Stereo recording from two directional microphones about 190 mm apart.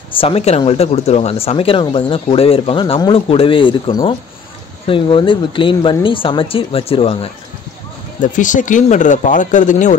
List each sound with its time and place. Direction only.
0.2 s speech: 30° left (ahead or behind)
8.2 s speech: 40° left (ahead or behind)